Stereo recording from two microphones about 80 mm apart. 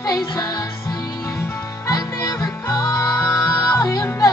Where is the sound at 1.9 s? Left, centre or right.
Left.